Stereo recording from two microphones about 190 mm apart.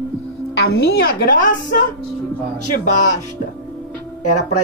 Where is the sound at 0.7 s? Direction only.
55° left (ahead or behind).